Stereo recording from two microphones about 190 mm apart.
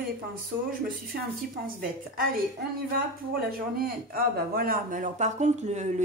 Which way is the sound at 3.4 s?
50° right (ahead or behind).